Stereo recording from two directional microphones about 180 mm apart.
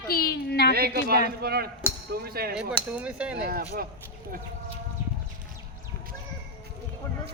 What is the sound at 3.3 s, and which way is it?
Speech, 55° right (ahead or behind).